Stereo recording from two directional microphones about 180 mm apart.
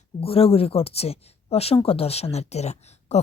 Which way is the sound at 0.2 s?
30° left (ahead or behind).